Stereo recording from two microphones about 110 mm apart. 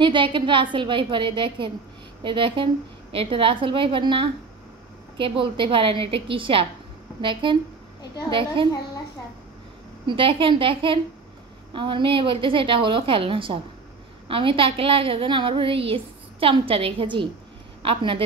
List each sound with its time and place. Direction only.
0.0 s a woman's voice: 50° right (ahead or behind)
10.0 s a woman's voice: 50° right (ahead or behind)